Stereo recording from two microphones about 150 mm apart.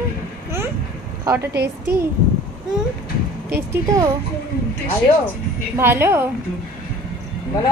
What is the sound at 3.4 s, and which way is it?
Speech, 20° right (ahead or behind).